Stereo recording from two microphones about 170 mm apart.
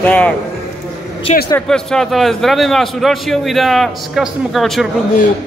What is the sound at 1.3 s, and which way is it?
Speech, 40° left (ahead or behind).